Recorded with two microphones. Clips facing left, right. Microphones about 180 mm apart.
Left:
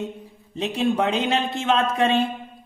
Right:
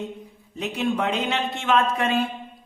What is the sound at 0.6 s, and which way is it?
A man's voice, 30° left (ahead or behind).